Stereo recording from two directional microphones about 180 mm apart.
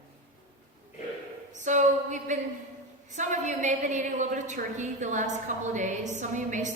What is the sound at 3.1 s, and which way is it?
A woman's voice, 40° right (ahead or behind).